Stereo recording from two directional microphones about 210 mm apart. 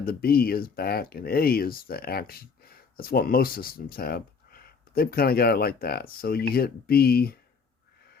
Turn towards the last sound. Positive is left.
turn(degrees=45)  # may be behind; listen again after turning